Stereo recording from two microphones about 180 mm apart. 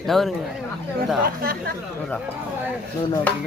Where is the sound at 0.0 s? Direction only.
Centre (ahead or behind).